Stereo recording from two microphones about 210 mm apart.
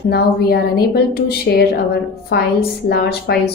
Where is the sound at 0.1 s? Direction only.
50° left (ahead or behind).